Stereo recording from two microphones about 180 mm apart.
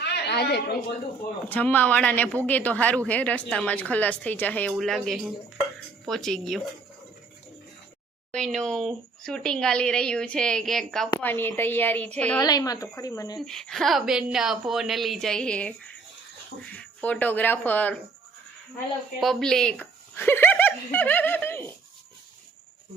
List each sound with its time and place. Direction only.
0.0 s a sound: 65° left (ahead or behind)
1.5 s a woman's voice: 10° left (ahead or behind)
8.3 s speech: centre (ahead or behind)
12.4 s speech: 20° left (ahead or behind)
13.4 s speech: 5° left (ahead or behind)
19.2 s speech: centre (ahead or behind)